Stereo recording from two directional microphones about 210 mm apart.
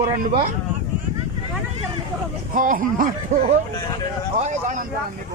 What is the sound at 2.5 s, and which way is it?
A man's voice, 40° right (ahead or behind).